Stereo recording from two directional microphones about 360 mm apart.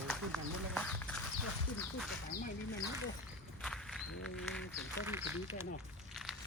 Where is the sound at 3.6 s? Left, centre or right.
Centre.